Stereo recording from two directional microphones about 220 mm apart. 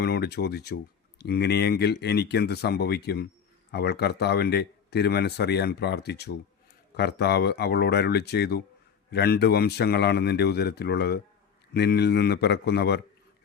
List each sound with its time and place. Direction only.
0.0 s speech: 45° left (ahead or behind)